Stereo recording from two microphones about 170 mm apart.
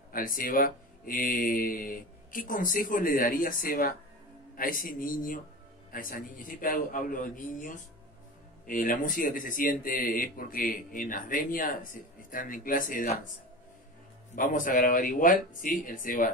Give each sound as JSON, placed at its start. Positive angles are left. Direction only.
{"t": 0.1, "sound": "speech", "side_deg": 55}
{"t": 14.3, "sound": "speech", "side_deg": 50}